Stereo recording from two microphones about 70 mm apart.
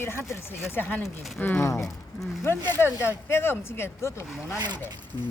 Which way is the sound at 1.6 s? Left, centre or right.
Left.